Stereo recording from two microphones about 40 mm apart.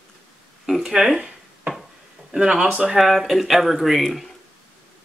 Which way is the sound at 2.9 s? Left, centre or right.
Centre.